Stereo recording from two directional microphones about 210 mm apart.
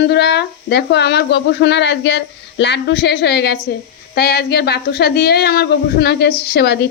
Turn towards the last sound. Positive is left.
turn(degrees=50)  # may be behind; listen again after turning